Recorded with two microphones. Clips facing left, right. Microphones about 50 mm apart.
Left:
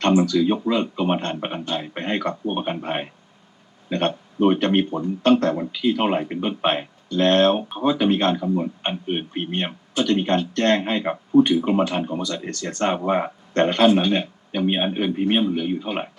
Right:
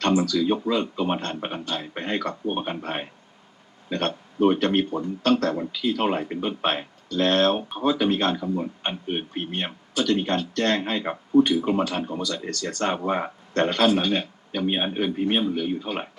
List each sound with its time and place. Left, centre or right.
0.0 s speech: left